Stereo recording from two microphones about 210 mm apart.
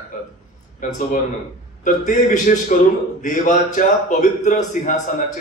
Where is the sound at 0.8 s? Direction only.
40° left (ahead or behind).